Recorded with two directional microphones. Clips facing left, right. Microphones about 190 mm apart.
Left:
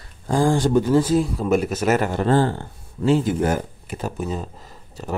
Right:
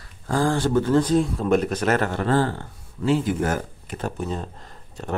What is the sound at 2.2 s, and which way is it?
Speech, 25° left (ahead or behind).